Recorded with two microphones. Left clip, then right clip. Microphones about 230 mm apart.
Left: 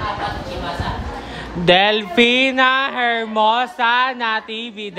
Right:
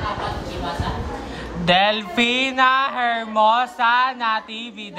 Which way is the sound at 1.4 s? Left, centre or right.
Left.